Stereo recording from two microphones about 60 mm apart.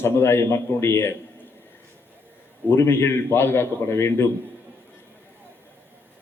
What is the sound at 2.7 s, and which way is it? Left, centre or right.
A man's voice, left.